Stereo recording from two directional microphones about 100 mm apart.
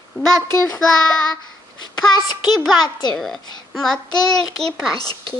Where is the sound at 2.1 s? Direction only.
45° left (ahead or behind).